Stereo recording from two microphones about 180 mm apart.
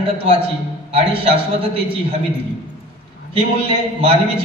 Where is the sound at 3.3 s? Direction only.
30° right (ahead or behind).